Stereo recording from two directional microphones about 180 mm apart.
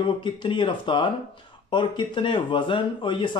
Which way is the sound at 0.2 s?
25° left (ahead or behind).